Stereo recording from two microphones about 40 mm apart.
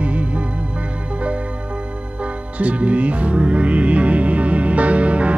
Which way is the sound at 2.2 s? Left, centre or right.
Right.